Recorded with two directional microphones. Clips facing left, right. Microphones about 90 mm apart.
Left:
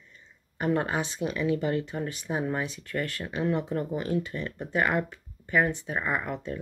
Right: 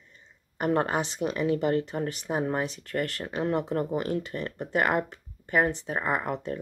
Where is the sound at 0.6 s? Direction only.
40° right (ahead or behind).